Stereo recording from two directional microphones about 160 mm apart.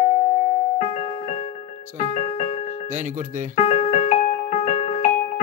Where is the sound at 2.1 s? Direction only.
45° left (ahead or behind).